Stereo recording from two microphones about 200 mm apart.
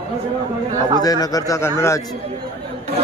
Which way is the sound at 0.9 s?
20° left (ahead or behind).